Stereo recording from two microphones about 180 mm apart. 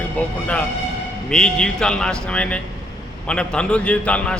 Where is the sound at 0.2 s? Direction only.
10° left (ahead or behind).